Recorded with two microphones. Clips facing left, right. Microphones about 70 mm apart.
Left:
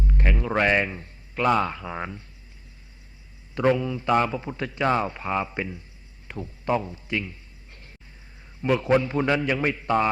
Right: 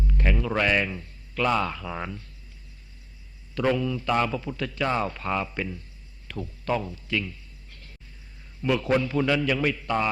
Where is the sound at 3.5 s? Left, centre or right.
Left.